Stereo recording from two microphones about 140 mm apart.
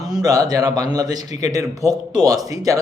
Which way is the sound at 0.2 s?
25° right (ahead or behind).